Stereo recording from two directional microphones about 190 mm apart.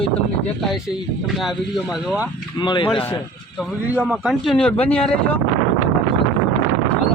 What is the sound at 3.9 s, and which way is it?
Speech, 5° right (ahead or behind).